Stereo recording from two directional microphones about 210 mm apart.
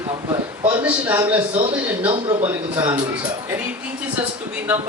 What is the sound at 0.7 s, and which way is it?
A man's voice, 10° right (ahead or behind).